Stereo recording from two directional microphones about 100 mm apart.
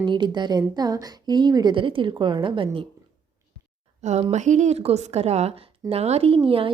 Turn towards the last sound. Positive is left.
turn(degrees=-65)  # may be behind; listen again after turning